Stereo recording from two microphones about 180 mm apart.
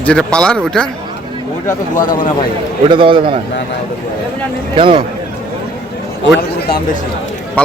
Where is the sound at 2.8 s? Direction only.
30° right (ahead or behind).